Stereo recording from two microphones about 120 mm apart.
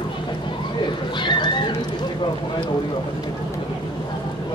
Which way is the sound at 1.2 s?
40° left (ahead or behind).